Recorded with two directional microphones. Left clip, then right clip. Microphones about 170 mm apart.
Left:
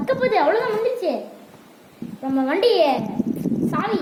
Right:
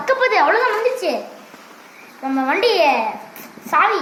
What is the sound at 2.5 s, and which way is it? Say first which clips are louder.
Speech: right 1 dB; 35° left (ahead or behind).